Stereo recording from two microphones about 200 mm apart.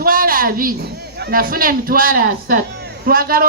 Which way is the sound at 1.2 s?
45° right (ahead or behind).